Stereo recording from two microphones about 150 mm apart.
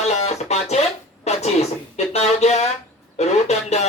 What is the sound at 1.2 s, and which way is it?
Speech, 45° left (ahead or behind).